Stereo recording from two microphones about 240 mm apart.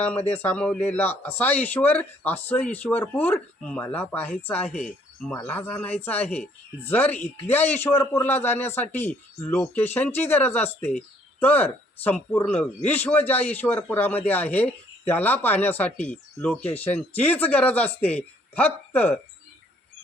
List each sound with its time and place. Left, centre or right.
0.4 s speech: centre